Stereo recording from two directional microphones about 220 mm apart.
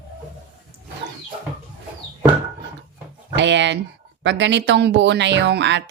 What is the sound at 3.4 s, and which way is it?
Speech, 55° right (ahead or behind).